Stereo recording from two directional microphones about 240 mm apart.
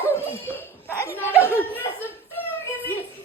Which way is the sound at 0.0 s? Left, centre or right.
Centre.